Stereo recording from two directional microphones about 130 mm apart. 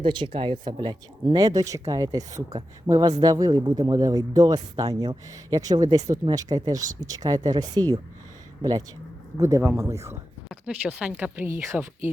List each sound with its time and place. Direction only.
0.0 s speech: 40° right (ahead or behind)
9.4 s speech: 20° right (ahead or behind)
10.5 s speech: 5° right (ahead or behind)